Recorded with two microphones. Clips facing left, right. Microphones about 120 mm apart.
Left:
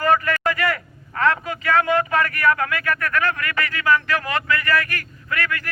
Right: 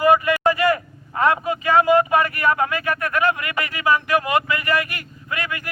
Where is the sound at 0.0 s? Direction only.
15° right (ahead or behind).